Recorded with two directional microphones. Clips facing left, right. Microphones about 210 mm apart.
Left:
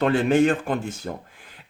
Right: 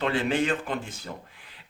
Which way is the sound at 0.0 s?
45° left (ahead or behind).